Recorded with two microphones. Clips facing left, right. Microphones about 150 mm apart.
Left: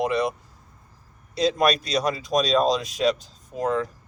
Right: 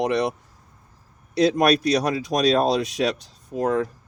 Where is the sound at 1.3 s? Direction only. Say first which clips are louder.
Right 3 dB; 70° right (ahead or behind).